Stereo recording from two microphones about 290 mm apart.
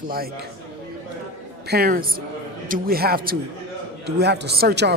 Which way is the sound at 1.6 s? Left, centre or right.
Right.